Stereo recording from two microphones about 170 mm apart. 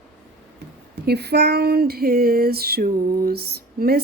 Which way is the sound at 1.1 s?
70° right (ahead or behind).